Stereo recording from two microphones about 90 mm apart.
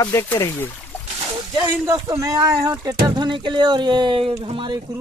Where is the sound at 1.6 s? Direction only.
25° right (ahead or behind).